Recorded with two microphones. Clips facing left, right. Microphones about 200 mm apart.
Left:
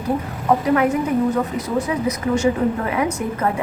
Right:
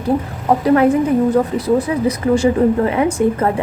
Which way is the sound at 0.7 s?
35° right (ahead or behind).